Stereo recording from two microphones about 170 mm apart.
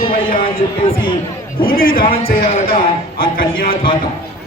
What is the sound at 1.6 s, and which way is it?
Speech, 60° left (ahead or behind).